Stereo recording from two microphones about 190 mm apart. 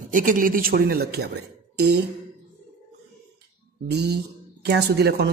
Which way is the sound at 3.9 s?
60° right (ahead or behind).